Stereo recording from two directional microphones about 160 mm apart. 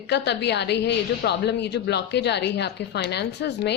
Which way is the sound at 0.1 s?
90° left.